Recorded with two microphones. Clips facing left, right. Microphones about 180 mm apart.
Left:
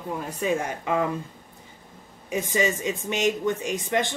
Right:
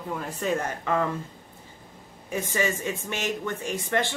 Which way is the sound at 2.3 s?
15° left (ahead or behind).